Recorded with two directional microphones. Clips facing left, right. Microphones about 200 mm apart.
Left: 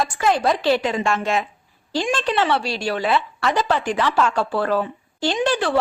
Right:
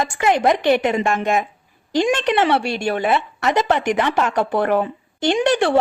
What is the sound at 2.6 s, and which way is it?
Speech, 55° right (ahead or behind).